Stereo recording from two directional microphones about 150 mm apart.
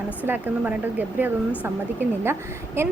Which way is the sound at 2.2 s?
15° right (ahead or behind).